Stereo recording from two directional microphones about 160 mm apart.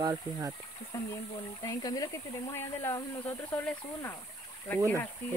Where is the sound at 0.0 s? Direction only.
25° right (ahead or behind).